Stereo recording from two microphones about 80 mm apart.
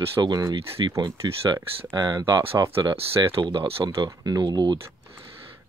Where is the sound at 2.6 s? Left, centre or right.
Right.